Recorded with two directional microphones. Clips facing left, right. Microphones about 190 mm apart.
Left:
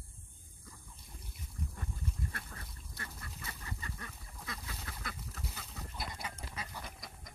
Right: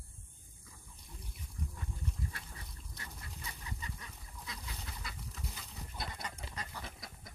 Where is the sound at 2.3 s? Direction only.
55° left (ahead or behind).